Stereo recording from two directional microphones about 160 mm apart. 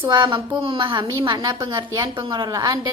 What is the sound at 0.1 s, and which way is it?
A woman's voice, 25° right (ahead or behind).